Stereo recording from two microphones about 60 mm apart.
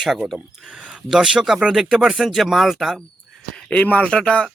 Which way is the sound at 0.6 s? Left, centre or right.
Centre.